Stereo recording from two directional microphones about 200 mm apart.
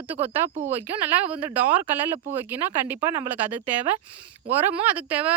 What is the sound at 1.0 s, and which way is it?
Speech, 5° right (ahead or behind).